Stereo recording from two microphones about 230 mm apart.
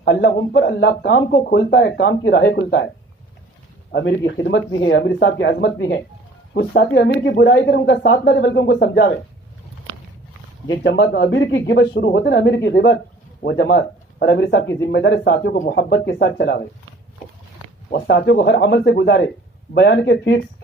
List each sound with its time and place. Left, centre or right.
0.0 s speech: left
3.9 s speech: left
10.7 s speech: left
17.9 s speech: left